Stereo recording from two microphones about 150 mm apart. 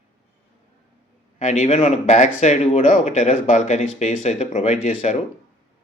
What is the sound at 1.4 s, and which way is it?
Speech, 55° left (ahead or behind).